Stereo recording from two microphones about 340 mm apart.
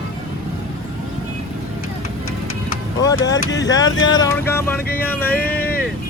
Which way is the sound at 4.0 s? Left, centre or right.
Centre.